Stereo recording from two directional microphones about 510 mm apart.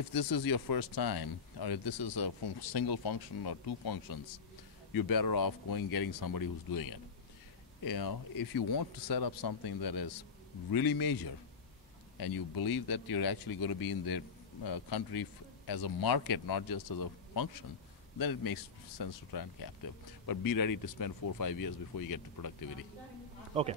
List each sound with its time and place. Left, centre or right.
0.1 s speech: left